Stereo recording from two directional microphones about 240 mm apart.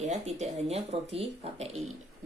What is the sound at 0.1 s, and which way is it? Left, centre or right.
Speech, right.